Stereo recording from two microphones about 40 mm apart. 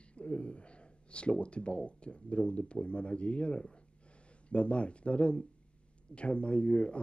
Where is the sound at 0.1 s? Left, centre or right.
Left.